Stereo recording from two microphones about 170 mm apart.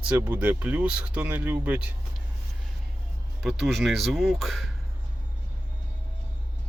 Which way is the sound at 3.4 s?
Centre (ahead or behind).